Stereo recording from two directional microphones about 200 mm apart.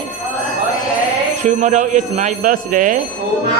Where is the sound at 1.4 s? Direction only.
40° right (ahead or behind).